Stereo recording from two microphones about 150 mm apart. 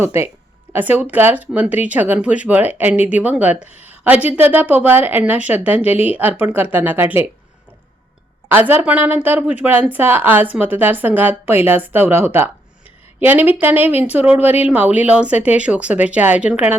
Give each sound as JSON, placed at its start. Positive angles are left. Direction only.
{"t": 0.0, "sound": "speech", "side_deg": -15}
{"t": 8.4, "sound": "speech", "side_deg": -15}